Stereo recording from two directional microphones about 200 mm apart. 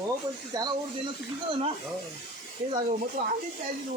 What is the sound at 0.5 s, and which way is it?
Speech, 20° right (ahead or behind).